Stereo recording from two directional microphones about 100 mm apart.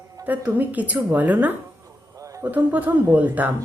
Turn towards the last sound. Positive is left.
turn(degrees=-15)  # may be behind; listen again after turning